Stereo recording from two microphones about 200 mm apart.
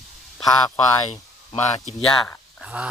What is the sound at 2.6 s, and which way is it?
Speech, 5° right (ahead or behind).